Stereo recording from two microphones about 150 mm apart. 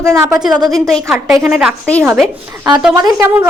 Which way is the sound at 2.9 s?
20° right (ahead or behind).